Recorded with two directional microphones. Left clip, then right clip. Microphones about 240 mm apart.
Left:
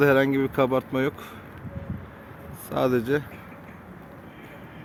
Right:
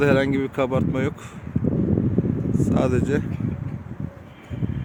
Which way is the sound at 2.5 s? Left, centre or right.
Centre.